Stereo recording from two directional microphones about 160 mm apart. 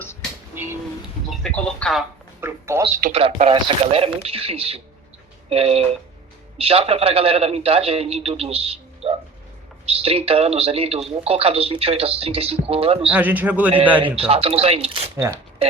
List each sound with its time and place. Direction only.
0.0 s dishes: 10° left (ahead or behind)
0.5 s a sound: 15° right (ahead or behind)
1.3 s speech: 5° left (ahead or behind)
2.4 s speech: 15° right (ahead or behind)
3.1 s a man's voice: 35° right (ahead or behind)
13.1 s a man's voice: 10° right (ahead or behind)
14.2 s a man's voice: 40° right (ahead or behind)
15.1 s a man's voice: 15° right (ahead or behind)